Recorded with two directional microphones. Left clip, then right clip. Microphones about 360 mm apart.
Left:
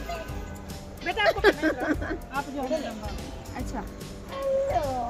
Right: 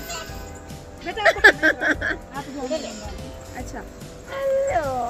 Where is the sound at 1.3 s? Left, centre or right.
Centre.